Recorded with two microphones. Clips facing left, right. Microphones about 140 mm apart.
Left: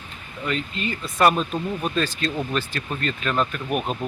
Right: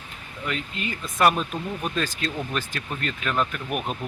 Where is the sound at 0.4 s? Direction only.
10° right (ahead or behind).